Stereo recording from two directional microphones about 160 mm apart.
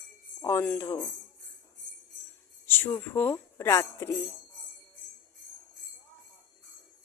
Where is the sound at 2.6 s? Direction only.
15° left (ahead or behind).